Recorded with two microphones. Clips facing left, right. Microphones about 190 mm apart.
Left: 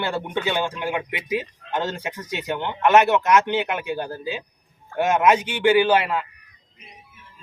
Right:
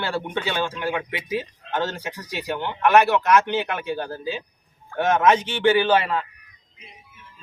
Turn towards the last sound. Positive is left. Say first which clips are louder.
# left 1 dB
turn(degrees=10)  # may be behind; listen again after turning